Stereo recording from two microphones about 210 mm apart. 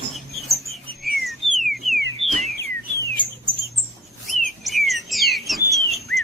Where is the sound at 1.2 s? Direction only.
Centre (ahead or behind).